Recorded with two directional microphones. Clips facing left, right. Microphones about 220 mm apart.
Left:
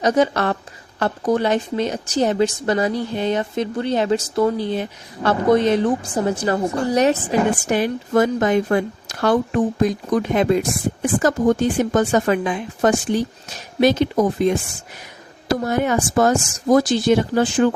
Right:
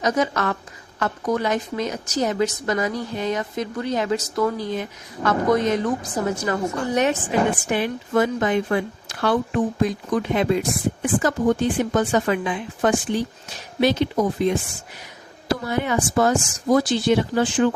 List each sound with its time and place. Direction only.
0.0 s a woman's voice: 30° left (ahead or behind)